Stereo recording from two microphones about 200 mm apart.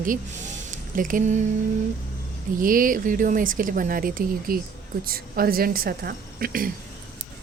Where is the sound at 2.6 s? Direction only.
45° right (ahead or behind).